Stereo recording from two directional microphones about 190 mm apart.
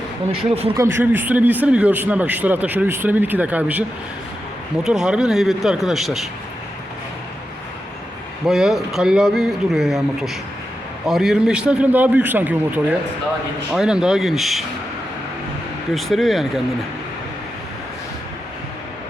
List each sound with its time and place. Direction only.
0.3 s speech: 30° right (ahead or behind)
0.8 s a man's voice: 10° right (ahead or behind)
8.4 s a man's voice: centre (ahead or behind)
16.0 s speech: centre (ahead or behind)